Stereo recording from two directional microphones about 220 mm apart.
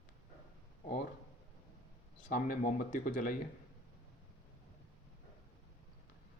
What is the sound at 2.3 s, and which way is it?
Speech, 40° left (ahead or behind).